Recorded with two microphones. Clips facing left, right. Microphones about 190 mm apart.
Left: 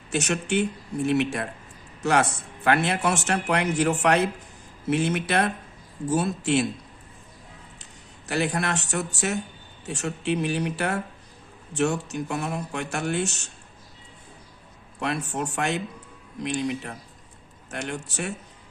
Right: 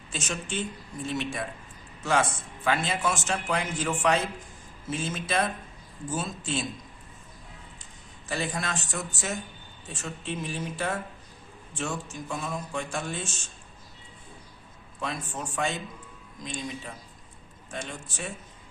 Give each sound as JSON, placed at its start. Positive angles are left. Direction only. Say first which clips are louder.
{"t": 0.1, "sound": "speech", "louder": "left 9 dB", "side_deg": 70}
{"t": 8.3, "sound": "speech", "louder": "left 6 dB", "side_deg": 70}
{"t": 15.0, "sound": "speech", "louder": "left 6 dB", "side_deg": 70}